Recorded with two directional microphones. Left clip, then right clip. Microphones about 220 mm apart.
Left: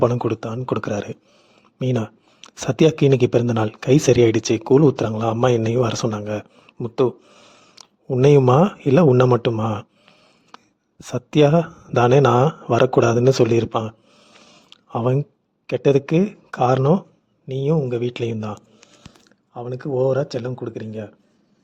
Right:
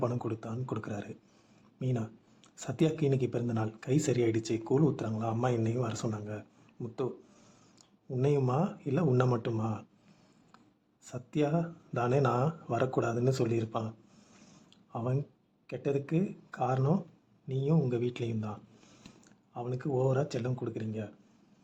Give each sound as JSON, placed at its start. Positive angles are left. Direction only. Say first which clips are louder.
{"t": 0.0, "sound": "speech", "louder": "left 15 dB", "side_deg": 40}
{"t": 10.5, "sound": "a sound", "louder": "left 17 dB", "side_deg": 45}
{"t": 11.0, "sound": "speech", "louder": "left 16 dB", "side_deg": 45}